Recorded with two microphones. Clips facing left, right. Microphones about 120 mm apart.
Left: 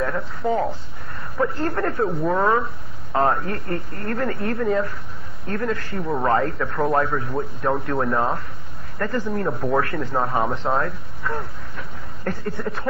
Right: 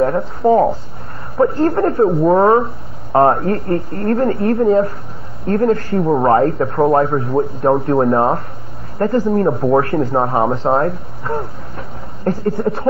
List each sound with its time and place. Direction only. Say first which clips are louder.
0.0 s speech: right 10 dB; 35° right (ahead or behind)